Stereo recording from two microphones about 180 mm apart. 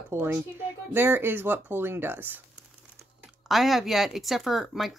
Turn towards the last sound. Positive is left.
turn(degrees=0)  # may be behind; listen again after turning